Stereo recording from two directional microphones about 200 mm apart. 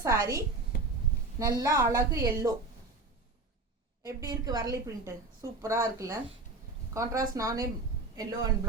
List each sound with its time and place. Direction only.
0.0 s a woman's voice: 15° right (ahead or behind)
4.0 s a woman's voice: 20° right (ahead or behind)